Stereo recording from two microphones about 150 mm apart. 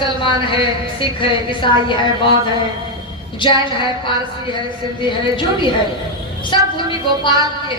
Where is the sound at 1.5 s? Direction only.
30° left (ahead or behind).